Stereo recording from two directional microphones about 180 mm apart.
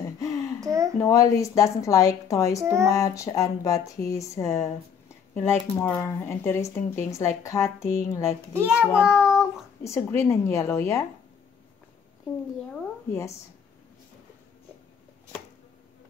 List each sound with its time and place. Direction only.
0.0 s a sound: 20° left (ahead or behind)
0.6 s a sound: 20° right (ahead or behind)
0.9 s speech: 20° left (ahead or behind)
2.6 s speech: 15° right (ahead or behind)
2.9 s speech: 20° left (ahead or behind)
8.9 s child singing: 5° right (ahead or behind)
9.8 s speech: 15° left (ahead or behind)